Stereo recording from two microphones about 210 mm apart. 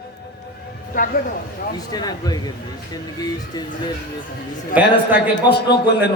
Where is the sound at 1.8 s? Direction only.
20° left (ahead or behind).